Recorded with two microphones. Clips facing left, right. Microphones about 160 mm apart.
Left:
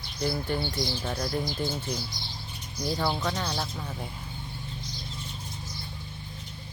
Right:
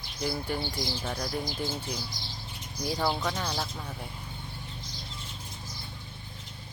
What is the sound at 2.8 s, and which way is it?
Speech, 10° right (ahead or behind).